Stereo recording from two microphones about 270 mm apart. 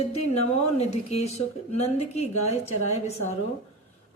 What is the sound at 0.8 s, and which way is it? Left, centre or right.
Speech, left.